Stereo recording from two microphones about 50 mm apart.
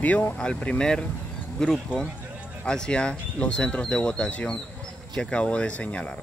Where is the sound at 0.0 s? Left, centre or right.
Left.